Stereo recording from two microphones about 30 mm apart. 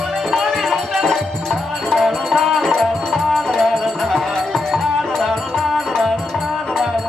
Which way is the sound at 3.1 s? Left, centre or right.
Centre.